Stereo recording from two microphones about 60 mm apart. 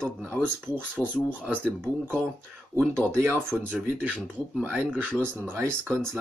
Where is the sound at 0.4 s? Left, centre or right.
Centre.